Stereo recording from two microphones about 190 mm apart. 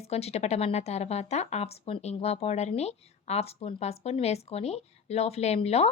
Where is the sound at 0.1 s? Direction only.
35° left (ahead or behind).